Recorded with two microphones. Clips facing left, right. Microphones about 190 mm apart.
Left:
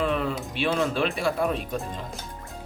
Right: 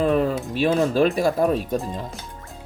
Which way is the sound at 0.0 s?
40° right (ahead or behind).